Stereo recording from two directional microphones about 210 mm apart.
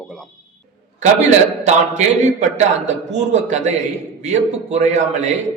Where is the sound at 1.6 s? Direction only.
35° right (ahead or behind).